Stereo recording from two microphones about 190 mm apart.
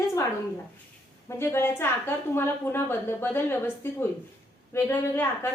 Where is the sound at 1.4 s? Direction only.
15° left (ahead or behind).